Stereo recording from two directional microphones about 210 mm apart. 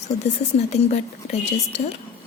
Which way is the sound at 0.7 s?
30° left (ahead or behind).